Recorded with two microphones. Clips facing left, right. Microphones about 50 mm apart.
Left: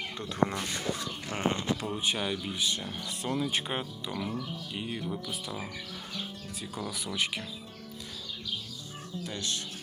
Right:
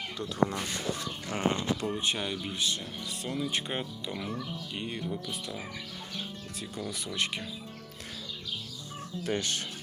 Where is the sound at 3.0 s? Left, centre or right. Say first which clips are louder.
Left 3 dB; left.